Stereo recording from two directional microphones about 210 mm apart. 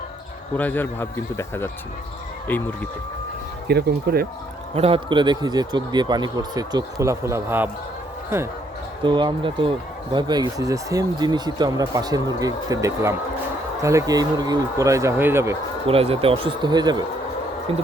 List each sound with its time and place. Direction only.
0.5 s a man's voice: 10° left (ahead or behind)
3.7 s speech: 50° right (ahead or behind)
4.7 s speech: 25° right (ahead or behind); by 7.7 s 10° right (ahead or behind)
9.0 s speech: 20° right (ahead or behind)
15.9 s speech: 25° right (ahead or behind)